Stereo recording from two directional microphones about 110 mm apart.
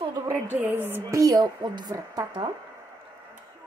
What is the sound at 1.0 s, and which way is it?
A woman's voice, 35° right (ahead or behind).